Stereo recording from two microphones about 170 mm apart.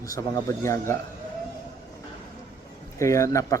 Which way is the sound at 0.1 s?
20° left (ahead or behind).